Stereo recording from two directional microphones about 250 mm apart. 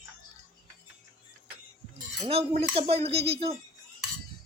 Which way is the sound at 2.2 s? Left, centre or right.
Right.